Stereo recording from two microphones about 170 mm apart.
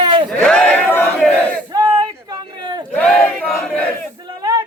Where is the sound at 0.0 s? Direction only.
30° right (ahead or behind).